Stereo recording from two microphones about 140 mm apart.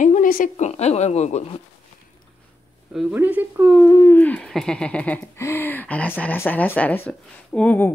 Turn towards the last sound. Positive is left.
turn(degrees=10)  # may be behind; listen again after turning